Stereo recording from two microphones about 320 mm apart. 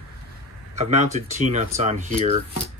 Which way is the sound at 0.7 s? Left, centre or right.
Right.